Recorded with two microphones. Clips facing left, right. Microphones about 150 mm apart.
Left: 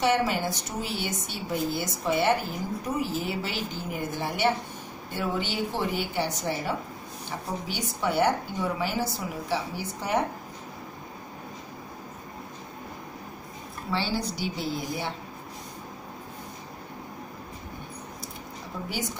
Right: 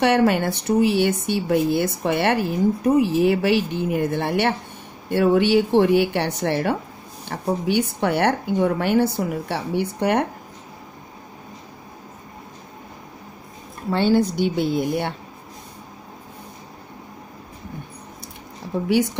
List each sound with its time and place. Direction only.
0.0 s speech: 65° right (ahead or behind)
13.9 s speech: 55° right (ahead or behind)